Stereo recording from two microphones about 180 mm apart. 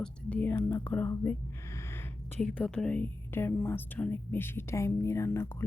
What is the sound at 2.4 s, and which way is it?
Speech, 5° left (ahead or behind).